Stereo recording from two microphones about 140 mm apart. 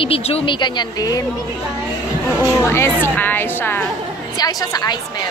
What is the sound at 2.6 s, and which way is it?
Speech, 20° left (ahead or behind).